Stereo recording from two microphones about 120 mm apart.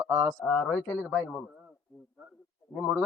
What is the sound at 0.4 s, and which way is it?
Speech, 15° left (ahead or behind).